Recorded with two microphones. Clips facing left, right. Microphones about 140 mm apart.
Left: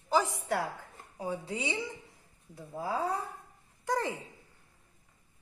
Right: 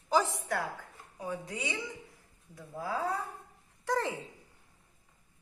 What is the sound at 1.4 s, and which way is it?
Speech, 25° left (ahead or behind).